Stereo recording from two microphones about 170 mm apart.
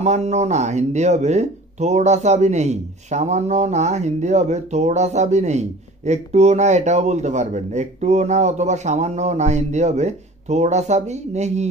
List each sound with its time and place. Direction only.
0.0 s speech: 40° right (ahead or behind)